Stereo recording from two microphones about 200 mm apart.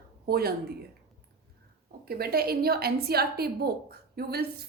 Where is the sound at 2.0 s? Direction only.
50° right (ahead or behind).